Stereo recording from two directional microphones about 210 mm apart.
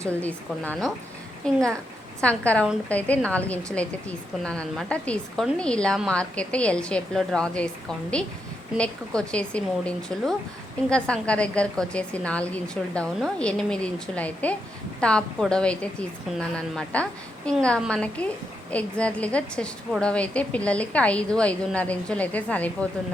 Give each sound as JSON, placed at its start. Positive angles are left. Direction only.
{"t": 0.2, "sound": "a woman's voice", "side_deg": 5}
{"t": 8.8, "sound": "a woman's voice", "side_deg": 5}